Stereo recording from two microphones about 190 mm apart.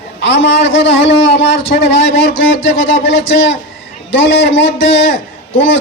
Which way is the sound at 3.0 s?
75° left (ahead or behind).